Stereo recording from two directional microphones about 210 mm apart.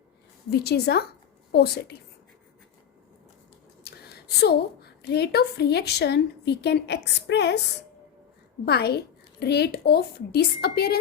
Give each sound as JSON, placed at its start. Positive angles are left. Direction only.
{"t": 0.5, "sound": "a woman's voice", "side_deg": 50}
{"t": 3.8, "sound": "a woman's voice", "side_deg": 50}
{"t": 8.6, "sound": "a woman's voice", "side_deg": 50}